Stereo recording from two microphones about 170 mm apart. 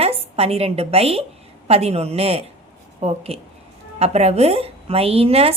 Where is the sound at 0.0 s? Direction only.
35° right (ahead or behind).